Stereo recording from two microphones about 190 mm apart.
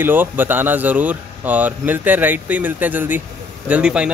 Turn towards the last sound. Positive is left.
turn(degrees=-5)  # may be behind; listen again after turning